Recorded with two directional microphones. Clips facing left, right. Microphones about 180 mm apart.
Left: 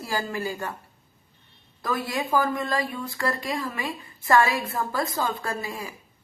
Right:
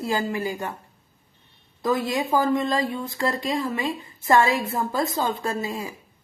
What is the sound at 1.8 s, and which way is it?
Speech, 20° right (ahead or behind).